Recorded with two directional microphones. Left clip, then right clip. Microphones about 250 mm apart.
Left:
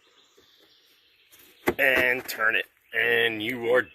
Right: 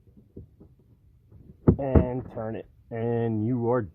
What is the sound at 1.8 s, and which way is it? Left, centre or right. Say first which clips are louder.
Speech: left 5 dB; centre.